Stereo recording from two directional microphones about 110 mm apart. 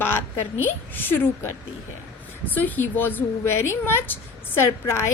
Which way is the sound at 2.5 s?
15° left (ahead or behind).